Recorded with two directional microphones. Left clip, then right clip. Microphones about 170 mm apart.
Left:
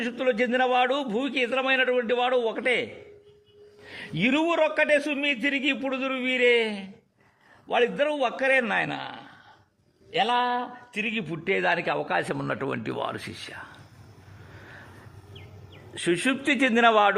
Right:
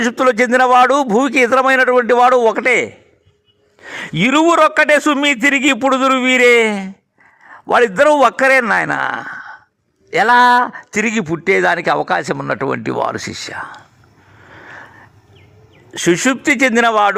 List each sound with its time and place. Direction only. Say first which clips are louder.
0.0 s a man's voice: right 12 dB; 45° right (ahead or behind); by 8.9 s 25° right (ahead or behind)
8.9 s speech: right 17 dB; 40° right (ahead or behind)
10.2 s speech: right 17 dB; 60° right (ahead or behind)
10.6 s a man's voice: right 15 dB; 40° right (ahead or behind)
14.5 s a sound: right 12 dB; 35° right (ahead or behind)
15.9 s speech: right 11 dB; 35° right (ahead or behind)